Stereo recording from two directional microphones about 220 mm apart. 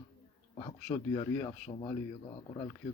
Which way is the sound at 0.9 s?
15° left (ahead or behind).